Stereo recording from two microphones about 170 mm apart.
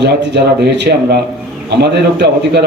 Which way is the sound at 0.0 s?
75° right (ahead or behind).